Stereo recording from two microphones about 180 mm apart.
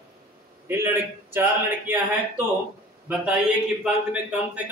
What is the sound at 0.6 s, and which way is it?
A man's voice, 10° right (ahead or behind).